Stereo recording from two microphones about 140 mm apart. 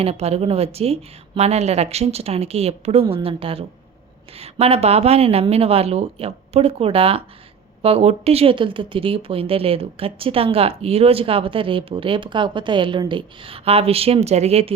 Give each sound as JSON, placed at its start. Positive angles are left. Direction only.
{"t": 0.0, "sound": "a woman's voice", "side_deg": -45}